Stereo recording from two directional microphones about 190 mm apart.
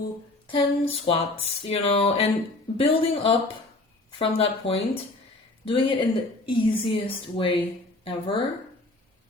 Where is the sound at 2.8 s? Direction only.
30° left (ahead or behind).